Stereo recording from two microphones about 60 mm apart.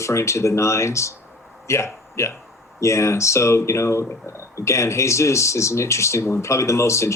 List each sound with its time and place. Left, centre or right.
0.0 s a man's voice: left